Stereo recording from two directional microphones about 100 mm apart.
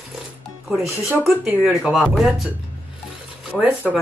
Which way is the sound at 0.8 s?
20° right (ahead or behind).